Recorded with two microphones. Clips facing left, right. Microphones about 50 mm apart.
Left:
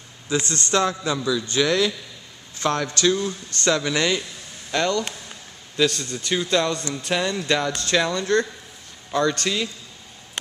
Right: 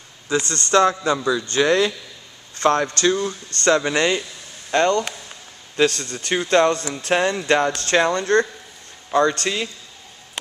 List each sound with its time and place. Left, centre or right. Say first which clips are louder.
0.3 s speech: right 4 dB; right
5.9 s speech: right 2 dB; right